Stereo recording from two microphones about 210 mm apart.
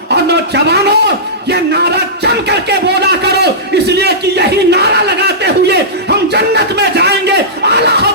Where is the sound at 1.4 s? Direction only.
50° right (ahead or behind).